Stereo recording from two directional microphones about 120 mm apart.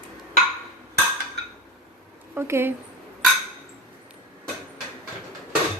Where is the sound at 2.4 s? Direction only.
20° right (ahead or behind).